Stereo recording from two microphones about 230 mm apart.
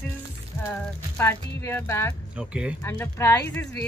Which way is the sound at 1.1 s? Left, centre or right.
Centre.